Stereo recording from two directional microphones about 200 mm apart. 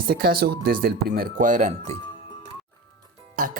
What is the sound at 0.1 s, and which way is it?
Speech, 50° right (ahead or behind).